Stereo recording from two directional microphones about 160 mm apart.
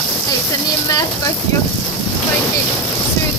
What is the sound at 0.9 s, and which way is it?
Speech, 25° left (ahead or behind).